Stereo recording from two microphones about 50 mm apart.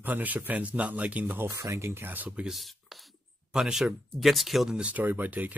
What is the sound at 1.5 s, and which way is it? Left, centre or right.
Speech, right.